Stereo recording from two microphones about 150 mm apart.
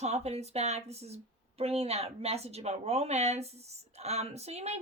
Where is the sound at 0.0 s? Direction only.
45° right (ahead or behind).